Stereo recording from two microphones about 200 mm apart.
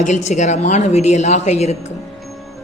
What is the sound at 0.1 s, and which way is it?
A woman's voice, 35° left (ahead or behind).